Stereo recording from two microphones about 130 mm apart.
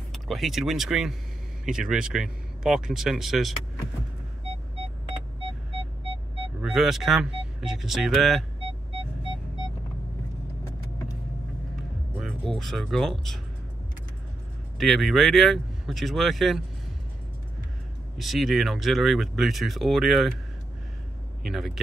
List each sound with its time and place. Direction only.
0.1 s speech: centre (ahead or behind)
5.8 s music: 45° left (ahead or behind)
6.6 s speech: centre (ahead or behind)
12.5 s speech: centre (ahead or behind)
14.8 s speech: centre (ahead or behind)
18.1 s speech: centre (ahead or behind)
21.5 s speech: centre (ahead or behind)